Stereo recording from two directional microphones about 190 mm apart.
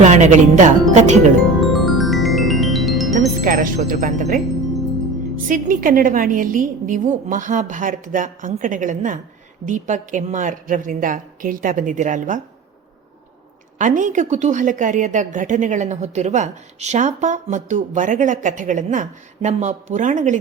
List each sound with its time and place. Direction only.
0.0 s a woman's voice: 40° right (ahead or behind)
1.6 s music: centre (ahead or behind)
3.2 s speech: 45° right (ahead or behind)
5.5 s a woman's voice: 45° right (ahead or behind)
13.7 s a woman's voice: 40° right (ahead or behind)